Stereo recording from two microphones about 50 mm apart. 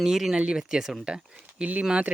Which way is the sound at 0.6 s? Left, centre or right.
Centre.